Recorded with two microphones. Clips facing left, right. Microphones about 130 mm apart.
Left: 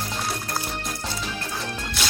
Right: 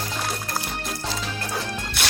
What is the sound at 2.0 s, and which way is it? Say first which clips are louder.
Music: right 1 dB; 60° right (ahead or behind).